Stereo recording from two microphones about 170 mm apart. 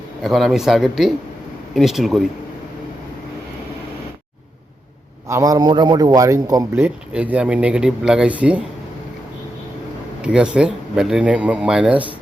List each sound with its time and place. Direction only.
0.2 s speech: centre (ahead or behind)
5.3 s a man's voice: 20° right (ahead or behind)
10.2 s speech: 5° right (ahead or behind)